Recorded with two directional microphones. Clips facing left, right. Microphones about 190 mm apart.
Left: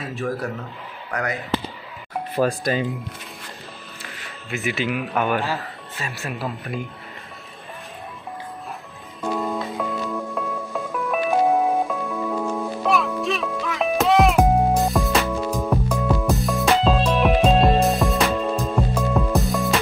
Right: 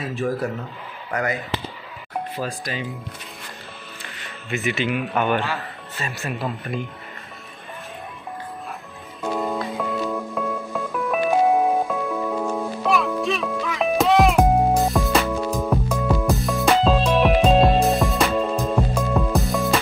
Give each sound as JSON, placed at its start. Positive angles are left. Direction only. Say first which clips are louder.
{"t": 0.0, "sound": "a man's voice", "louder": "right 2 dB", "side_deg": 0}
{"t": 2.3, "sound": "speech", "louder": "left 12 dB", "side_deg": 50}
{"t": 4.2, "sound": "speech", "louder": "right 2 dB", "side_deg": 0}
{"t": 9.4, "sound": "music", "louder": "right 1 dB", "side_deg": 0}